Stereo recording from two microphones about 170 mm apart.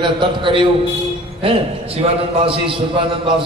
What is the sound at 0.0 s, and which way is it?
A man's voice, 30° right (ahead or behind).